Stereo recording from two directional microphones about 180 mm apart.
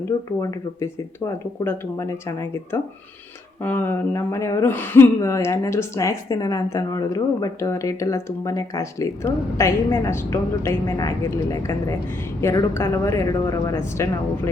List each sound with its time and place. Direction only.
0.1 s speech: 25° left (ahead or behind)
1.6 s speech: 15° left (ahead or behind)